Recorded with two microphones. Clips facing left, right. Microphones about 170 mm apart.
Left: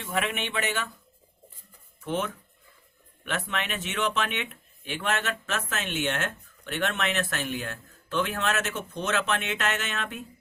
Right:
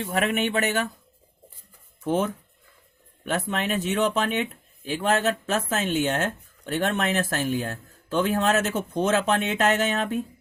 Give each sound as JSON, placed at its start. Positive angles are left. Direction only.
{"t": 0.1, "sound": "speech", "side_deg": -45}
{"t": 2.0, "sound": "speech", "side_deg": -40}